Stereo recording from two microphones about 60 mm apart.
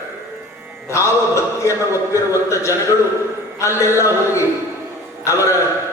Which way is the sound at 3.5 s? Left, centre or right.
Left.